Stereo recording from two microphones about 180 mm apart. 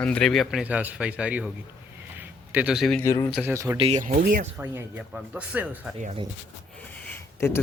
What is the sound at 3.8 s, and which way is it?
Speech, 40° right (ahead or behind).